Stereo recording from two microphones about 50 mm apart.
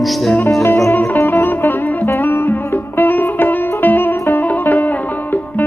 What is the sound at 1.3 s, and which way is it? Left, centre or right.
Music, left.